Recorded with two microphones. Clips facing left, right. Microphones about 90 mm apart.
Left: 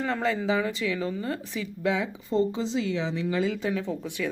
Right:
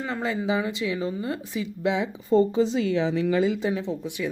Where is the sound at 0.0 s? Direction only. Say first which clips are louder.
Left 1 dB; 5° right (ahead or behind); by 2.0 s 20° right (ahead or behind).